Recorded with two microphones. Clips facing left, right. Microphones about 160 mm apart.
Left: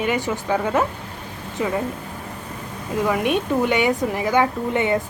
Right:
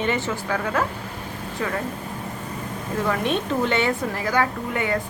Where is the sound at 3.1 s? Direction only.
15° left (ahead or behind).